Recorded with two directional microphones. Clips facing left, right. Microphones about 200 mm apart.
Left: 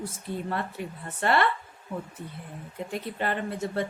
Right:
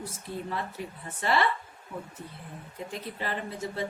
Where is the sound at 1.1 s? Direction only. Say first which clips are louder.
Left 2 dB; 60° left (ahead or behind).